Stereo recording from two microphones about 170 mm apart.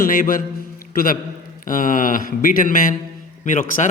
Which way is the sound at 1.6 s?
50° left (ahead or behind).